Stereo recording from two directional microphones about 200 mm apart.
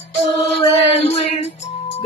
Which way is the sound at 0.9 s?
35° left (ahead or behind).